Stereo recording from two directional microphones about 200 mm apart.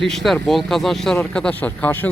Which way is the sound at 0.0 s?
Centre (ahead or behind).